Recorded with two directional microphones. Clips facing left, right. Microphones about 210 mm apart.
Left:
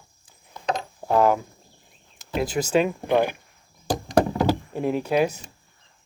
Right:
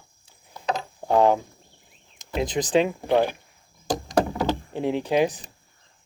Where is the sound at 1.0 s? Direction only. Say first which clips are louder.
Right 1 dB; 20° right (ahead or behind).